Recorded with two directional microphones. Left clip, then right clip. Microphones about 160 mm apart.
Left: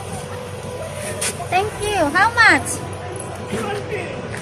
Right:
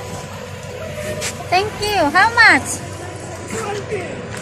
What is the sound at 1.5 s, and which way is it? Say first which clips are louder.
Speech: right 3 dB; 65° right (ahead or behind).